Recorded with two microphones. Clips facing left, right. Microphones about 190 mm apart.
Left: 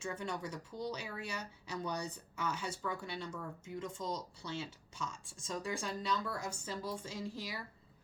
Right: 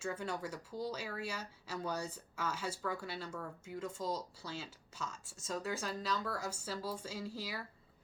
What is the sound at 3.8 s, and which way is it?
Speech, 5° right (ahead or behind).